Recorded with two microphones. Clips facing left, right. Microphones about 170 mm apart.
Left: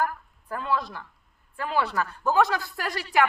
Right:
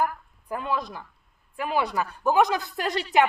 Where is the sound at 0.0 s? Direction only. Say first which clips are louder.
Right 1 dB; 15° right (ahead or behind).